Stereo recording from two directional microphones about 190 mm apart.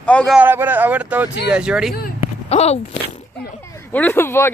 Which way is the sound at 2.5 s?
35° left (ahead or behind).